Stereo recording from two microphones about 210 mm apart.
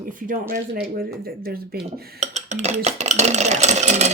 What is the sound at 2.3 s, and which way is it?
Speech, 30° right (ahead or behind).